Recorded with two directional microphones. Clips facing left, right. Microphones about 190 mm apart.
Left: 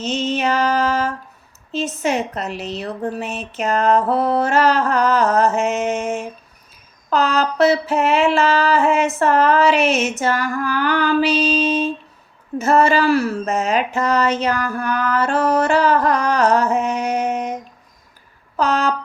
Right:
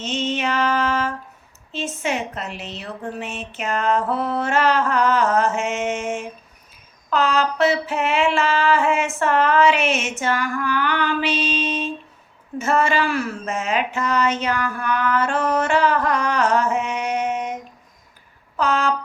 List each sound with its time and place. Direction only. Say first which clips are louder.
0.0 s music: left 3 dB; 40° left (ahead or behind)
1.7 s speech: left 5 dB; 40° left (ahead or behind)
18.5 s a sound: left 2 dB; 40° left (ahead or behind)